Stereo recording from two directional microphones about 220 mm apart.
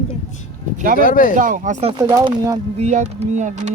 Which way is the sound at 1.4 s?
35° right (ahead or behind).